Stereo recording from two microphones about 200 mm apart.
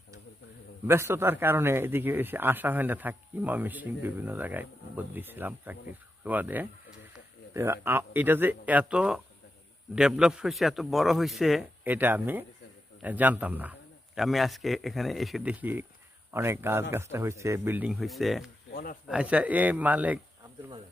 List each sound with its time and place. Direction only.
0.9 s speech: 10° right (ahead or behind)
18.7 s speech: 45° left (ahead or behind)
19.0 s speech: 5° right (ahead or behind)